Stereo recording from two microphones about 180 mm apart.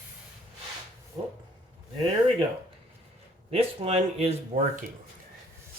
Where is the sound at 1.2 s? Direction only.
20° right (ahead or behind).